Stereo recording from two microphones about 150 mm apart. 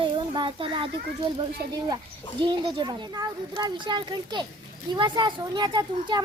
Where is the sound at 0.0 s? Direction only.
35° right (ahead or behind).